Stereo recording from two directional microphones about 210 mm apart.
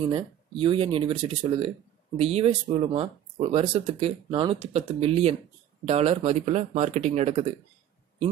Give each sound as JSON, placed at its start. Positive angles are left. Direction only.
{"t": 0.1, "sound": "speech", "side_deg": -25}